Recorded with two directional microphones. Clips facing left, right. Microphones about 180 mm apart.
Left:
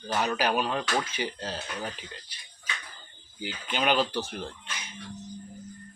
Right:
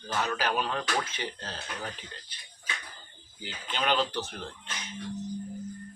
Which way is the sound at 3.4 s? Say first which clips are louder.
Left 3 dB; 10° left (ahead or behind).